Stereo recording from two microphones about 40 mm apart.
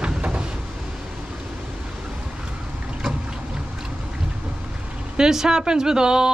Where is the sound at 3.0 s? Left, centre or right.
Centre.